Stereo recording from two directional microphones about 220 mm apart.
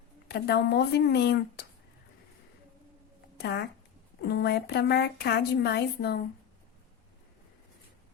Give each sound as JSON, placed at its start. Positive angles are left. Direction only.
{"t": 0.3, "sound": "a woman's voice", "side_deg": 50}
{"t": 3.3, "sound": "a woman's voice", "side_deg": 50}